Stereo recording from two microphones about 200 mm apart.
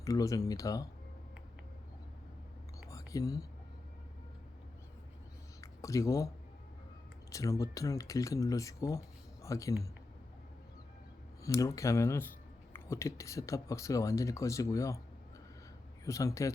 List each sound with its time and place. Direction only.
0.0 s speech: 15° left (ahead or behind)
2.9 s whispering: 15° left (ahead or behind)
5.5 s a sound: 15° left (ahead or behind)
7.3 s speech: 15° left (ahead or behind)
11.4 s speech: 15° left (ahead or behind)
16.0 s speech: 15° left (ahead or behind)